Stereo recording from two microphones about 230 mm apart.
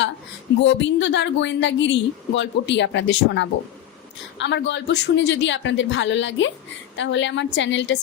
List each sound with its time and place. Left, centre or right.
0.6 s a woman's voice: left